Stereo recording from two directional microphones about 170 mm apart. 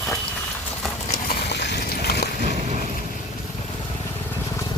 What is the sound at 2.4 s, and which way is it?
Boat, 45° right (ahead or behind).